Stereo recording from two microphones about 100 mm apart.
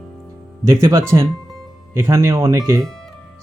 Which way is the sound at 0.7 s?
25° right (ahead or behind).